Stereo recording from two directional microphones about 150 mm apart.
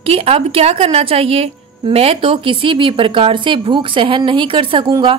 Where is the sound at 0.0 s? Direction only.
40° right (ahead or behind).